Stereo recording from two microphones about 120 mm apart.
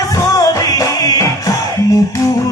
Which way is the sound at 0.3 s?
30° left (ahead or behind).